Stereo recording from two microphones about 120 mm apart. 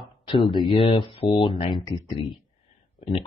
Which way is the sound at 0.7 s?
50° left (ahead or behind).